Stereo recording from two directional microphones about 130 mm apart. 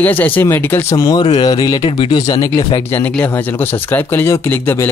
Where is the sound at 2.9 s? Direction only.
15° left (ahead or behind).